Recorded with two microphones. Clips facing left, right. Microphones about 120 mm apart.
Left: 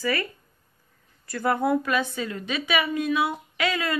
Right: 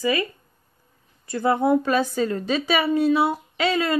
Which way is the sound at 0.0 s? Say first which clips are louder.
Right 4 dB; 15° right (ahead or behind).